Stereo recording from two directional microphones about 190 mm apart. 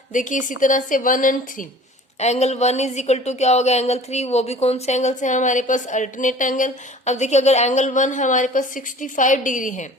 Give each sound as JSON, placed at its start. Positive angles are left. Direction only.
{"t": 0.1, "sound": "a woman's voice", "side_deg": 40}